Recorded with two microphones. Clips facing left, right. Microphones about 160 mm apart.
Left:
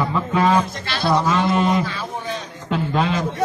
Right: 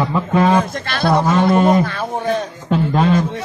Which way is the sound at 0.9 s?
55° right (ahead or behind).